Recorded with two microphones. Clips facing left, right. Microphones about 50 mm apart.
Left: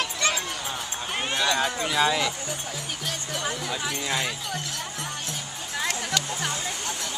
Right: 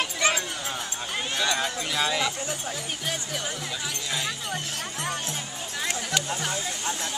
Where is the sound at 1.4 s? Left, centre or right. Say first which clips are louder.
Left 2 dB; centre.